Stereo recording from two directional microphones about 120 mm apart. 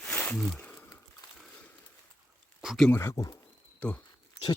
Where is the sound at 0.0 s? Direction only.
10° left (ahead or behind).